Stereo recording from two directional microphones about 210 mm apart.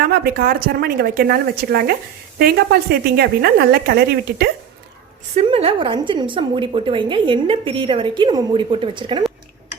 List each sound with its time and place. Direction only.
0.1 s a woman's voice: 45° right (ahead or behind)
5.3 s a woman's voice: 30° right (ahead or behind)